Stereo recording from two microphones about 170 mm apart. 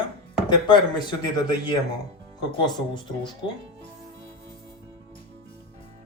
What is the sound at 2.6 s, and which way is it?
Speech, 25° left (ahead or behind).